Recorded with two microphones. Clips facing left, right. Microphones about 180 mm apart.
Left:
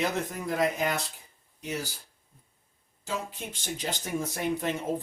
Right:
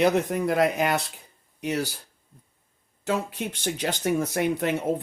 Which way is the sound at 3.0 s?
70° right (ahead or behind).